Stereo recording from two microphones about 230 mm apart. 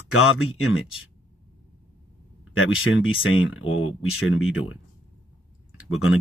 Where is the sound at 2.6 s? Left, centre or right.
Left.